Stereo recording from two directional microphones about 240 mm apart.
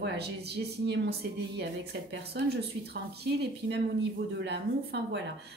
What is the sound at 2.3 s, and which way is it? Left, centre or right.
Speech, right.